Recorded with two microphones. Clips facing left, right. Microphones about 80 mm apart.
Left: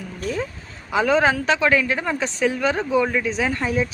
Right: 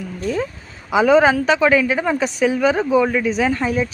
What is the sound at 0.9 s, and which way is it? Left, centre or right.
A woman's voice, centre.